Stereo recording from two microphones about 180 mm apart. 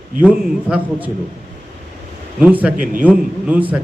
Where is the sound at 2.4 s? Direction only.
10° right (ahead or behind).